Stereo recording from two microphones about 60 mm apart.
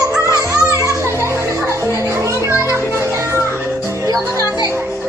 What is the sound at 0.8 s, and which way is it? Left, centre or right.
Children playing, right.